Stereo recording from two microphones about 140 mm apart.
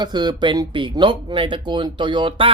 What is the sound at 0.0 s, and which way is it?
Speech, 30° right (ahead or behind).